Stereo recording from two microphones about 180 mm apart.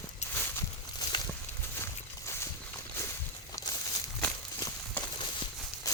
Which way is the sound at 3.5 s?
20° left (ahead or behind).